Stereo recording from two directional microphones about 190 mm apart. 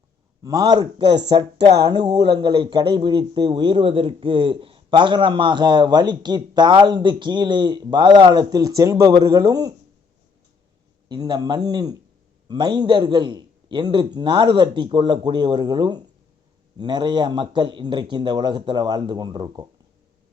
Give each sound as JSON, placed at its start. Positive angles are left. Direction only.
{"t": 0.4, "sound": "a man's voice", "side_deg": -20}
{"t": 11.1, "sound": "a man's voice", "side_deg": -20}